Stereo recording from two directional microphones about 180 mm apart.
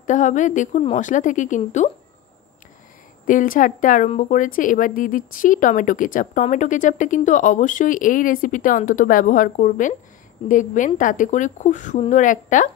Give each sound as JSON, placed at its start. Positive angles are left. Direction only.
{"t": 0.0, "sound": "speech", "side_deg": 45}
{"t": 3.3, "sound": "speech", "side_deg": 45}